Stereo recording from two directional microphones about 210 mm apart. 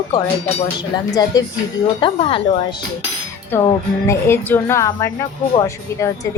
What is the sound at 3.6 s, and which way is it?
Speech, 10° left (ahead or behind).